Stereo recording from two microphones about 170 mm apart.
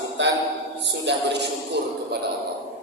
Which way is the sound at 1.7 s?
75° right (ahead or behind).